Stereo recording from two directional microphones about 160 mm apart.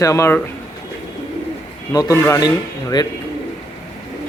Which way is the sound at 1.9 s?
20° left (ahead or behind).